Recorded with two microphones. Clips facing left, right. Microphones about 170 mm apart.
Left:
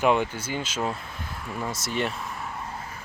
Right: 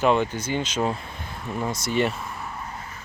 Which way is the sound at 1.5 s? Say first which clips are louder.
Right 4 dB; 15° right (ahead or behind).